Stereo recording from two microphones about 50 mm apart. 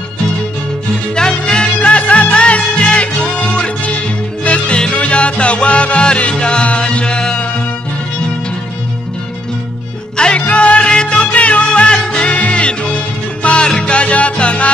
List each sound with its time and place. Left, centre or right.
1.1 s music: centre
10.1 s music: left